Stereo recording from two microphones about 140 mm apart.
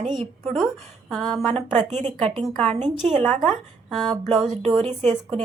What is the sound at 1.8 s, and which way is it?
Speech, 55° right (ahead or behind).